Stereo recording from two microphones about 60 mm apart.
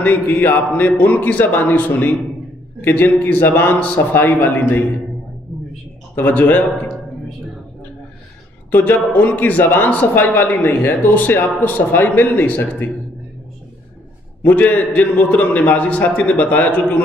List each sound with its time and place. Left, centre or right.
0.0 s a man's voice: left
6.1 s a man's voice: left
8.7 s a man's voice: left
14.4 s a man's voice: left